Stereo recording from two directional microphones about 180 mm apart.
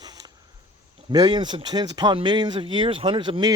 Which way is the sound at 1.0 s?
25° right (ahead or behind).